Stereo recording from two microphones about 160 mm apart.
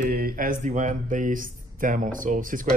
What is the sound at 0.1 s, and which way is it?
A man's voice, 65° right (ahead or behind).